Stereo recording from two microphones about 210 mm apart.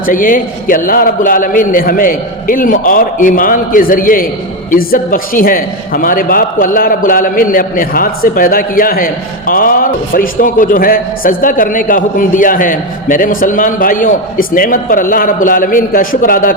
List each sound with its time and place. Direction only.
0.0 s a man's voice: 40° left (ahead or behind)